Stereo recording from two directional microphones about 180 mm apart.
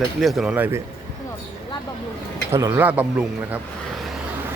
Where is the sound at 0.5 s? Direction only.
10° right (ahead or behind).